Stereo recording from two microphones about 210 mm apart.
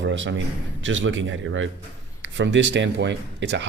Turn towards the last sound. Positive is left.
turn(degrees=-55)  # may be behind; listen again after turning